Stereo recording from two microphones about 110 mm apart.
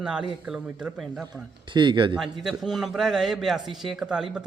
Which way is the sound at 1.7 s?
45° right (ahead or behind).